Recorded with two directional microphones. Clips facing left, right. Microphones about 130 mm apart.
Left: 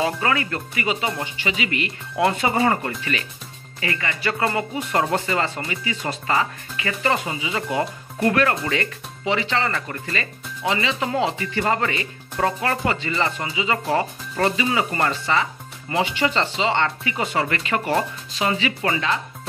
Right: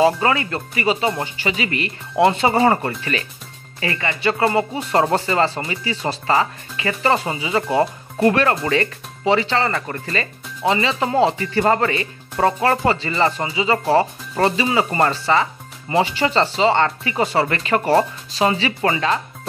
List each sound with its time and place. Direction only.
0.0 s speech: 30° right (ahead or behind)